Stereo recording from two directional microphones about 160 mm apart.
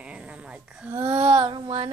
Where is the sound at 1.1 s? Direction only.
35° right (ahead or behind).